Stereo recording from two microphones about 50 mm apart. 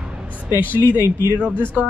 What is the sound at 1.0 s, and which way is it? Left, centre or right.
Speech, right.